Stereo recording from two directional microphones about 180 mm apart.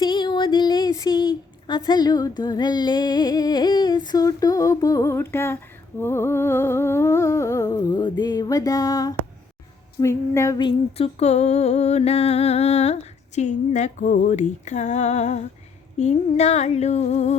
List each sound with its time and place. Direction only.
0.0 s speech: 25° left (ahead or behind)
6.0 s humming: 15° left (ahead or behind)
10.0 s female singing: 15° left (ahead or behind); by 17.3 s 40° left (ahead or behind)